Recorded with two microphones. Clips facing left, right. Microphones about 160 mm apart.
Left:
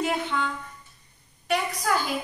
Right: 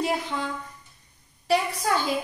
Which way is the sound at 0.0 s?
35° right (ahead or behind).